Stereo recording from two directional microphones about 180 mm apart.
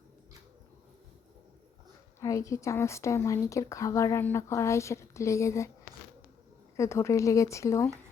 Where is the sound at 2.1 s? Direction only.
15° left (ahead or behind).